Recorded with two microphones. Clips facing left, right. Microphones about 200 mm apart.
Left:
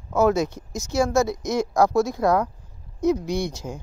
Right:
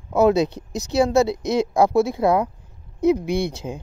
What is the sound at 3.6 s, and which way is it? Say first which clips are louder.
Speech: right 3 dB; 15° right (ahead or behind).